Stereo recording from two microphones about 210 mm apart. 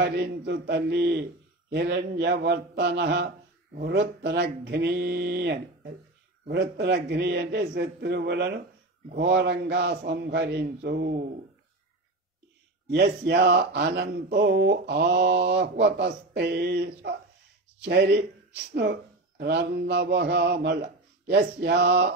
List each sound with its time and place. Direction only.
0.0 s a man's voice: 50° right (ahead or behind)
12.9 s a man's voice: 50° right (ahead or behind)